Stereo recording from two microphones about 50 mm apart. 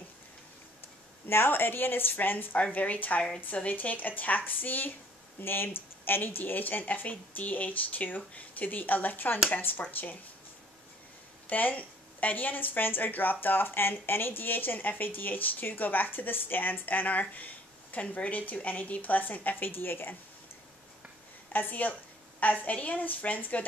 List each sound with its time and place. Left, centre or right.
1.3 s a woman's voice: left
11.4 s a woman's voice: left
21.5 s a woman's voice: left